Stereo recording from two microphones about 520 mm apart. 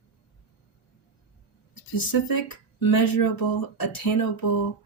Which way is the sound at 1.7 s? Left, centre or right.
Left.